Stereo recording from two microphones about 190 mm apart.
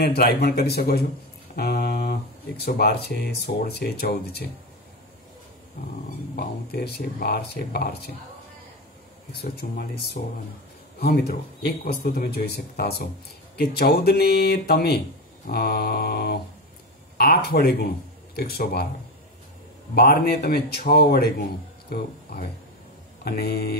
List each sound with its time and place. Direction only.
0.0 s a man's voice: 55° left (ahead or behind)
1.5 s music: 55° left (ahead or behind)
2.6 s a man's voice: 55° left (ahead or behind)
6.3 s a man's voice: 55° left (ahead or behind)
9.3 s a man's voice: 55° left (ahead or behind)
19.9 s a man's voice: 55° left (ahead or behind)